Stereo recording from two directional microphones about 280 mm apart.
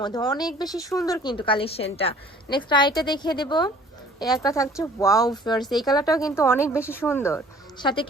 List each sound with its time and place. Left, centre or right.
0.0 s speech: centre
5.6 s speech: centre
5.9 s speech: centre